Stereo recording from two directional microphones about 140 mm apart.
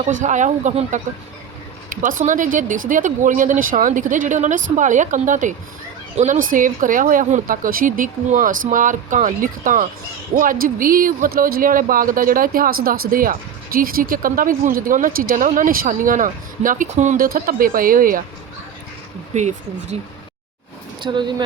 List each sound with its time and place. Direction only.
0.0 s speech: 60° right (ahead or behind)
1.9 s speech: 75° right (ahead or behind)
10.3 s speech: 85° right
19.3 s speech: 55° right (ahead or behind)
21.0 s speech: 35° right (ahead or behind)